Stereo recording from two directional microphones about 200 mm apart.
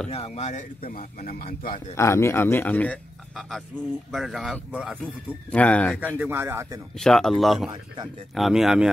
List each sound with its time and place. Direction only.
0.1 s speech: 35° left (ahead or behind)
2.0 s speech: 15° left (ahead or behind)
6.1 s speech: 10° right (ahead or behind)
7.0 s speech: centre (ahead or behind)